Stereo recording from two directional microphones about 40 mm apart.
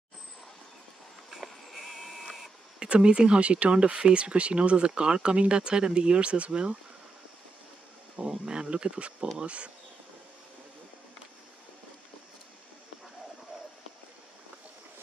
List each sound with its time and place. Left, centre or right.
1.3 s sheep: centre
2.8 s speech: right
8.3 s speech: right